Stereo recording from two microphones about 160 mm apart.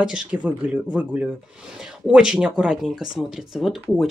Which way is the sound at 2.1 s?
5° right (ahead or behind).